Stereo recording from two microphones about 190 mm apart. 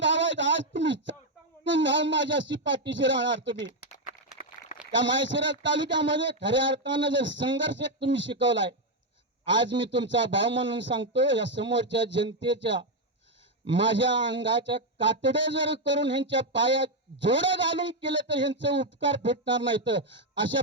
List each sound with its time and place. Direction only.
0.0 s a sound: 70° right (ahead or behind)
1.6 s speech: 70° right (ahead or behind)
3.7 s speech: 45° left (ahead or behind)
4.4 s a sound: 40° left (ahead or behind)
4.9 s speech: 75° right (ahead or behind)
9.5 s speech: 70° right (ahead or behind)